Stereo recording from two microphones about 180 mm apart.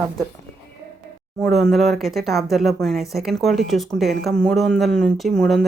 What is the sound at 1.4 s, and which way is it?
Speech, centre (ahead or behind).